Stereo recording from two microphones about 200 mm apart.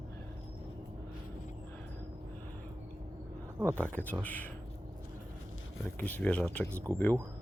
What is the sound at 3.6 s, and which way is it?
Speech, 10° right (ahead or behind).